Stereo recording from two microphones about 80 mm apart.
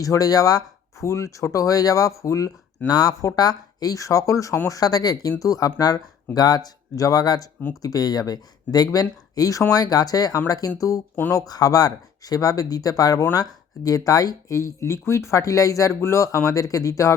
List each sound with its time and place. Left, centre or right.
0.0 s speech: left
1.0 s speech: left
2.8 s speech: left